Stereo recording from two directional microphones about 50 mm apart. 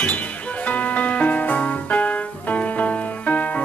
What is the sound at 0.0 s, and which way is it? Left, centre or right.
Music, left.